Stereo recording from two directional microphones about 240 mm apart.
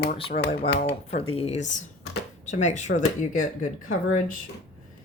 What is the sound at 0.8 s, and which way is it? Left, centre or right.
A woman's voice, left.